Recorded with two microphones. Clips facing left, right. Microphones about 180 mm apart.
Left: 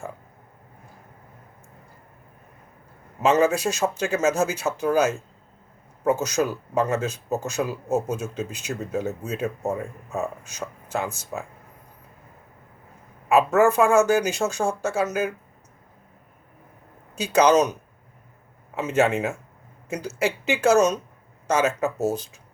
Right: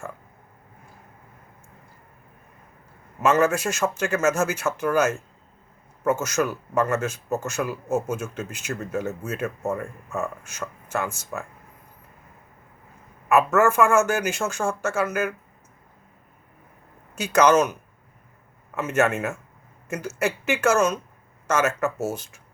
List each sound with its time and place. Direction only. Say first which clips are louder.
3.2 s speech: left 1 dB; 15° left (ahead or behind)
6.2 s speech: left 1 dB; 15° left (ahead or behind)
8.0 s speech: even; 35° left (ahead or behind)
8.4 s speech: left 1 dB; 15° left (ahead or behind)
13.2 s speech: left 1 dB; 15° left (ahead or behind)
17.3 s speech: even; 15° left (ahead or behind)